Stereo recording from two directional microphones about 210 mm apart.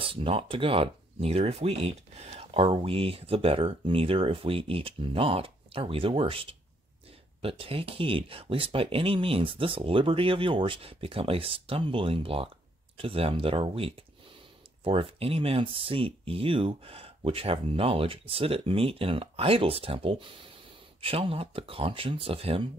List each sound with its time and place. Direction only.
0.0 s speech: 25° right (ahead or behind)